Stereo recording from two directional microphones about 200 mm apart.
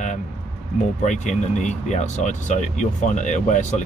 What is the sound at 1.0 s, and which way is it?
Speech, 35° left (ahead or behind).